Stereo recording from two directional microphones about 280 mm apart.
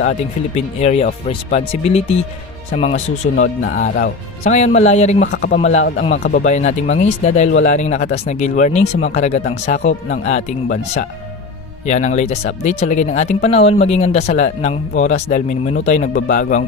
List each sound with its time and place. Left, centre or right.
0.6 s speech: left